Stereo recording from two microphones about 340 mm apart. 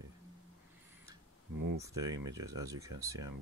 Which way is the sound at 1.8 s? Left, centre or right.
Centre.